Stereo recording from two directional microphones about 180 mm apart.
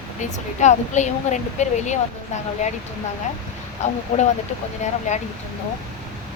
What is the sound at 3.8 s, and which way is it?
Speech, 40° left (ahead or behind).